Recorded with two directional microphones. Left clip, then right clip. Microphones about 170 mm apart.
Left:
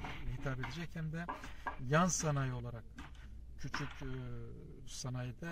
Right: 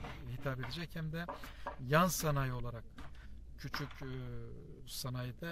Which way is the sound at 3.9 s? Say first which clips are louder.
Even; 30° right (ahead or behind).